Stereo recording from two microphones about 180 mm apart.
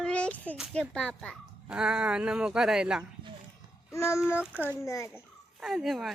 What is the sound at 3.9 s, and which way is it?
Speech, 15° left (ahead or behind).